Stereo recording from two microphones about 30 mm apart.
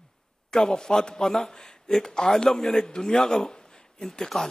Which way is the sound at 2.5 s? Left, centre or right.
Centre.